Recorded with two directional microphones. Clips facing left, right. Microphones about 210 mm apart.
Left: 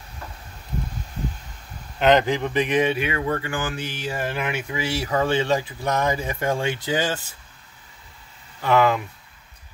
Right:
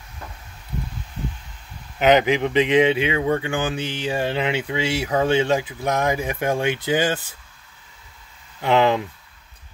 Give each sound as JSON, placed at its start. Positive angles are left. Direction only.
{"t": 2.0, "sound": "speech", "side_deg": -5}
{"t": 2.2, "sound": "speech", "side_deg": -20}
{"t": 8.5, "sound": "speech", "side_deg": -25}